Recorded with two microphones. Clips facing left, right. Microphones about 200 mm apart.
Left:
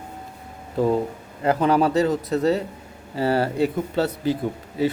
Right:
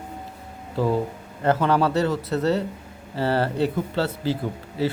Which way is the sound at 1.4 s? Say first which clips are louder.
Left 1 dB; 10° left (ahead or behind).